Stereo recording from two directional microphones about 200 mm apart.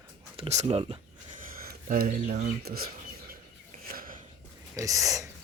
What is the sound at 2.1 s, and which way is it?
Speech, 40° right (ahead or behind).